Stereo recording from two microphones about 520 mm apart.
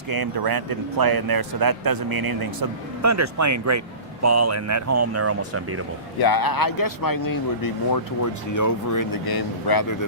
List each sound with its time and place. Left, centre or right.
0.1 s speech: right
6.1 s speech: left